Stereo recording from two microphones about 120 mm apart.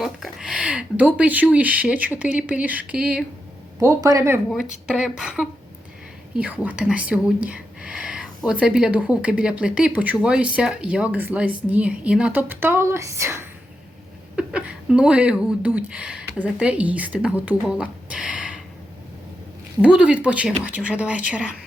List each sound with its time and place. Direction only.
0.0 s speech: 5° right (ahead or behind)
3.8 s speech: 25° right (ahead or behind)
4.9 s speech: 5° right (ahead or behind); by 13.5 s 25° right (ahead or behind)
14.3 s speech: 10° right (ahead or behind)
19.8 s speech: 10° right (ahead or behind)